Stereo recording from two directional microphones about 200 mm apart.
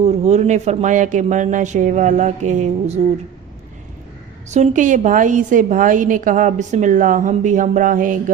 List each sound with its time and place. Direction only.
0.0 s a woman's voice: 35° right (ahead or behind)
4.4 s a woman's voice: 35° right (ahead or behind)